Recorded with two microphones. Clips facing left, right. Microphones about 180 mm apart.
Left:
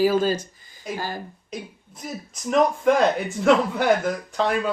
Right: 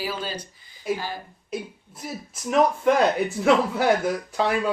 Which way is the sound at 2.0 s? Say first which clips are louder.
Left 1 dB; 5° right (ahead or behind).